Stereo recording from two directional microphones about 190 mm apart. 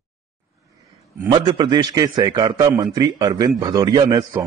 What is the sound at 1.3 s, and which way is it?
A man's voice, 25° right (ahead or behind).